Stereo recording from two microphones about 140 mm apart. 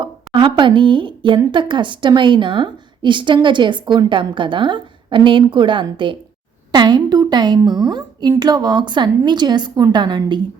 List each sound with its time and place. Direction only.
0.3 s a woman's voice: 35° right (ahead or behind)